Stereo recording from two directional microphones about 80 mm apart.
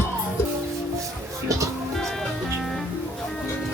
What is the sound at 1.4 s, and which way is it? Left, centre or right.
Speech, right.